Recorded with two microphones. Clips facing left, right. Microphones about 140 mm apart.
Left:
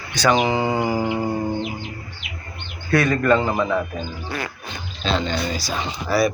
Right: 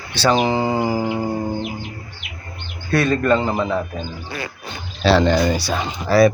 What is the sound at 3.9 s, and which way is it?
Speech, 35° right (ahead or behind).